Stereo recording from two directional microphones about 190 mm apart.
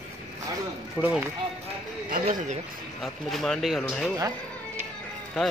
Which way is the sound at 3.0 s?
Centre (ahead or behind).